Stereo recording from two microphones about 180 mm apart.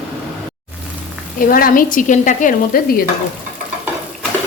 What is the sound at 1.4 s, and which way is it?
Stir, 50° left (ahead or behind).